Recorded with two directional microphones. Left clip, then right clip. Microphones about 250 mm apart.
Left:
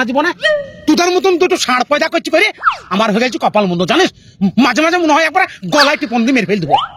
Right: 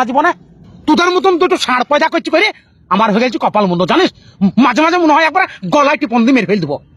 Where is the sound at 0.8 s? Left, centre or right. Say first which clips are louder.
Right 2 dB; left.